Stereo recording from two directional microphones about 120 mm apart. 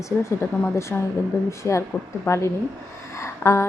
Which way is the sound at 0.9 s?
5° left (ahead or behind).